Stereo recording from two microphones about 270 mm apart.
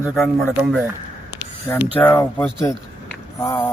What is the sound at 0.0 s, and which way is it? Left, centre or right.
Speech, centre.